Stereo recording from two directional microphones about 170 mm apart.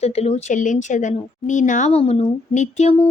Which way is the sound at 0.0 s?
40° left (ahead or behind).